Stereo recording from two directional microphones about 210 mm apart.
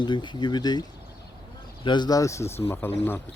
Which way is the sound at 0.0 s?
20° left (ahead or behind).